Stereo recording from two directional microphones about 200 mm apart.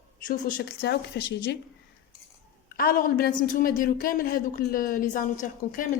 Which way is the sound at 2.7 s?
45° left (ahead or behind).